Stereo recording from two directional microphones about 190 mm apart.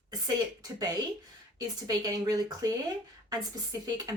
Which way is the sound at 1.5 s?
20° right (ahead or behind).